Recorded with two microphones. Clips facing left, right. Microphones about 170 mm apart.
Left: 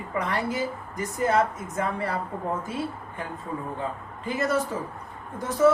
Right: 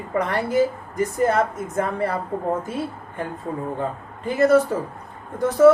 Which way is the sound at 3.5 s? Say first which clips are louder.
Right 4 dB; 40° right (ahead or behind).